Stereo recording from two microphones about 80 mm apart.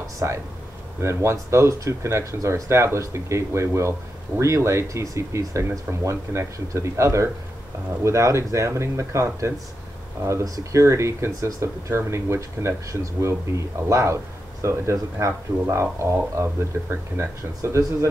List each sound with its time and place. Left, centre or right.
0.2 s speech: right
17.6 s speech: right